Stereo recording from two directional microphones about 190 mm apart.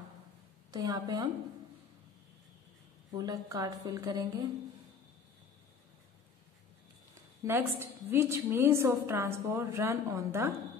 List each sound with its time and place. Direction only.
0.7 s speech: 20° right (ahead or behind)
3.2 s speech: 20° right (ahead or behind)
7.4 s a woman's voice: 10° right (ahead or behind)